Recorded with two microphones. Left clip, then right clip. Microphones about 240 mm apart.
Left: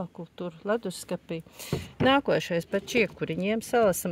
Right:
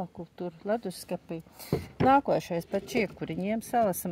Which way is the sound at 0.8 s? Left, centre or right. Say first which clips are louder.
Left 2 dB; left.